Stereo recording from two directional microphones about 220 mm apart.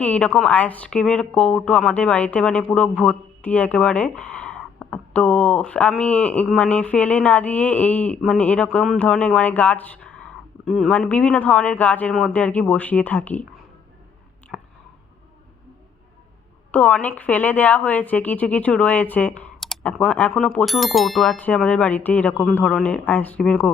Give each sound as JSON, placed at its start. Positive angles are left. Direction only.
{"t": 0.0, "sound": "a woman's voice", "side_deg": 5}
{"t": 14.5, "sound": "a sound", "side_deg": -5}
{"t": 16.7, "sound": "a woman's voice", "side_deg": 5}